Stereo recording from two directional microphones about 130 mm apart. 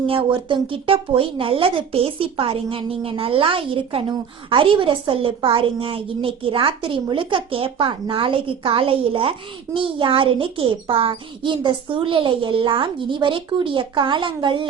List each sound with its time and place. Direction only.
0.1 s a child's voice: 40° right (ahead or behind)